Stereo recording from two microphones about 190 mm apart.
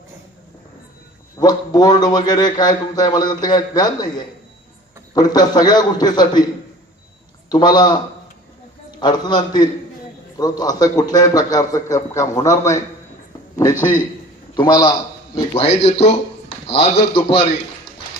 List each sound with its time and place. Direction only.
1.4 s a man's voice: 20° left (ahead or behind)
5.1 s a man's voice: 20° left (ahead or behind)
7.5 s a man's voice: 20° left (ahead or behind)
14.5 s a man's voice: 20° left (ahead or behind)
15.5 s a man's voice: 35° left (ahead or behind)